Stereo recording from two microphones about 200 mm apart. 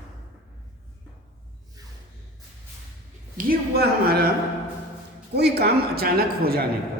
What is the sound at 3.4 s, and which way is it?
Speech, 50° right (ahead or behind).